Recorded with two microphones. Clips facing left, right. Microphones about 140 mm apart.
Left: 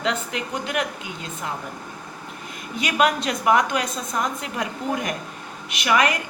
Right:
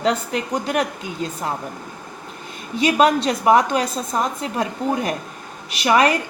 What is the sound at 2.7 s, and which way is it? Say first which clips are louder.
A woman's voice: right 5 dB; 30° right (ahead or behind).